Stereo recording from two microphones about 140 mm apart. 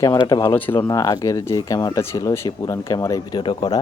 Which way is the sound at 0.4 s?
15° left (ahead or behind).